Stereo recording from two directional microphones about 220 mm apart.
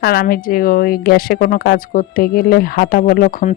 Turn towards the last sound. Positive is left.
turn(degrees=40)  # may be behind; listen again after turning